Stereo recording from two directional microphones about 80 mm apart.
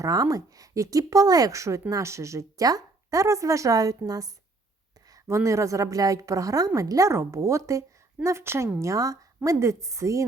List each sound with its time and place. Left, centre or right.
0.0 s a woman's voice: right
8.8 s a woman's voice: right